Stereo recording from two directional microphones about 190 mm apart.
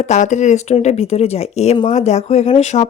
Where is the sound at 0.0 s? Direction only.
40° left (ahead or behind).